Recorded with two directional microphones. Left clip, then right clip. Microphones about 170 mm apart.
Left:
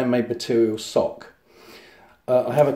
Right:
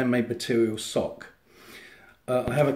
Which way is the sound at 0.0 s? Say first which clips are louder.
Left 4 dB; 25° right (ahead or behind).